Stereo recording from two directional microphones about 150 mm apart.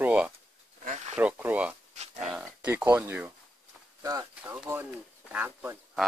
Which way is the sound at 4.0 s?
25° right (ahead or behind).